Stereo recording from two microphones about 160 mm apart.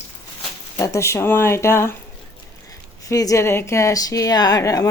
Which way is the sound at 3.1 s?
20° left (ahead or behind).